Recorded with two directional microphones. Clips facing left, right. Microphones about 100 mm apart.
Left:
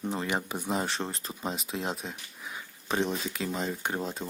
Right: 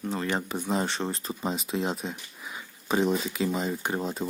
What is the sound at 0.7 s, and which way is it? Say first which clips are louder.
Speech: right 3 dB; centre (ahead or behind).